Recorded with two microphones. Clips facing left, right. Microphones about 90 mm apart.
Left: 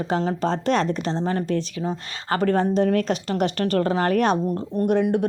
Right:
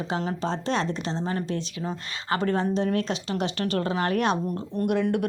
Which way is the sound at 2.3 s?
45° left (ahead or behind).